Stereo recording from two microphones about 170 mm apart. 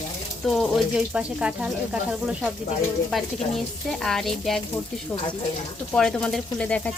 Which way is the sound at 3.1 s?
Centre (ahead or behind).